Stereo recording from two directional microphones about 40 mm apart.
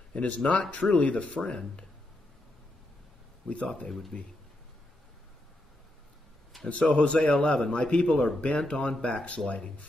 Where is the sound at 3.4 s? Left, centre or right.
Left.